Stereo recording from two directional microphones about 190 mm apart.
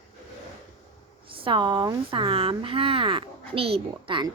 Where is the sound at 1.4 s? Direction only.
25° right (ahead or behind).